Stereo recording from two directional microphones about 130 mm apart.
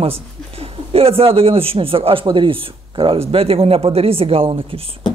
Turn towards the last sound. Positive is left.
turn(degrees=-45)  # may be behind; listen again after turning